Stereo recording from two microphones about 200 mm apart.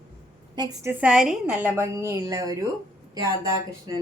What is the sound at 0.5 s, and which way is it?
A woman's voice, 15° right (ahead or behind).